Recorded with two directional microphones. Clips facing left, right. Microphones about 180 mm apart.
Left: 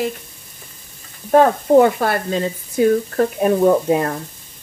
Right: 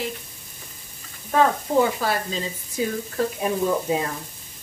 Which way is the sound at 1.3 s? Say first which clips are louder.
Left 8 dB; 60° left (ahead or behind).